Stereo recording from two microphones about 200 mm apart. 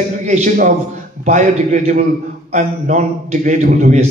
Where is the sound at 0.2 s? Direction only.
35° right (ahead or behind).